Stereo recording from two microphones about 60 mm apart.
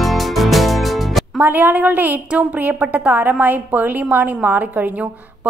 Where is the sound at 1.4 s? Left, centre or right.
Right.